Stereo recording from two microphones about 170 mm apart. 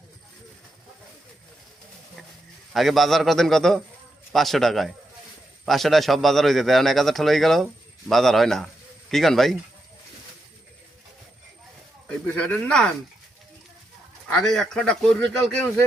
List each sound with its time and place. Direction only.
2.7 s a man's voice: centre (ahead or behind)
12.0 s a man's voice: 5° left (ahead or behind)
14.3 s a man's voice: 5° left (ahead or behind)